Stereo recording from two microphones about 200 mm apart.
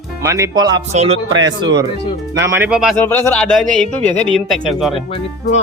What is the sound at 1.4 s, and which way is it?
Speech, 20° right (ahead or behind).